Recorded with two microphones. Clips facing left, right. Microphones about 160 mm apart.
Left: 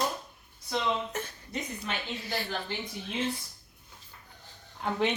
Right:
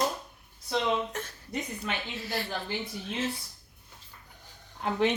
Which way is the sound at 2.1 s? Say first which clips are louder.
Right 1 dB; centre (ahead or behind).